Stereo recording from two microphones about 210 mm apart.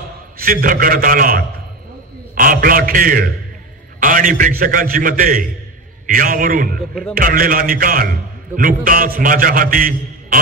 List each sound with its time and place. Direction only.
0.4 s a man's voice: 40° right (ahead or behind)